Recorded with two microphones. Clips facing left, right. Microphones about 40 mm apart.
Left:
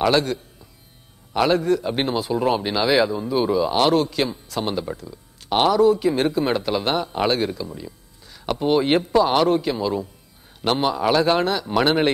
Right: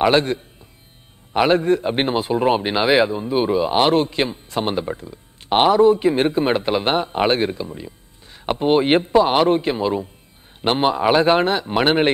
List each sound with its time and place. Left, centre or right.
0.0 s a man's voice: right